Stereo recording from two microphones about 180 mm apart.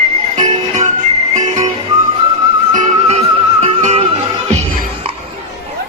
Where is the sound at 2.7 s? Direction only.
40° right (ahead or behind).